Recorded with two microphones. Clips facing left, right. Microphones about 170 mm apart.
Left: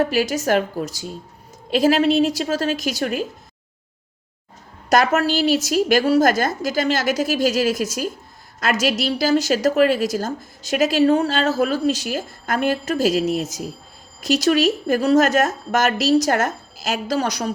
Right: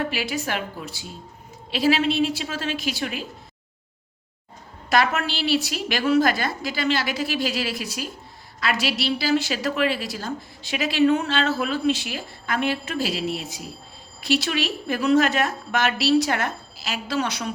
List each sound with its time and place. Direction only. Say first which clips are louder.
0.0 s speech: left 7 dB; 40° left (ahead or behind)
4.9 s a woman's voice: left 5 dB; 40° left (ahead or behind)